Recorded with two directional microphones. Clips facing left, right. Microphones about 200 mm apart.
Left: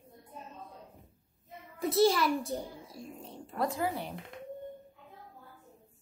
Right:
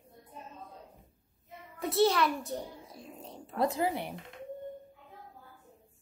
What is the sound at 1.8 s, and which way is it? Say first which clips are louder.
A child's voice: left 1 dB; centre (ahead or behind).